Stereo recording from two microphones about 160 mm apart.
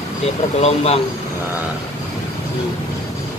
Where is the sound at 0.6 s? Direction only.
40° left (ahead or behind).